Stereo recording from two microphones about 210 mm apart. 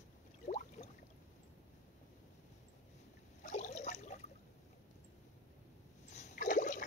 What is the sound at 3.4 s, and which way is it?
Water, 35° left (ahead or behind).